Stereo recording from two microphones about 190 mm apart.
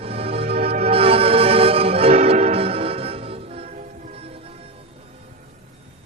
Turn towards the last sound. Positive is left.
turn(degrees=-30)  # may be behind; listen again after turning